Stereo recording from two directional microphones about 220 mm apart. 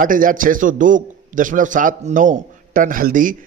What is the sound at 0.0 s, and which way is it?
A man's voice, 40° right (ahead or behind).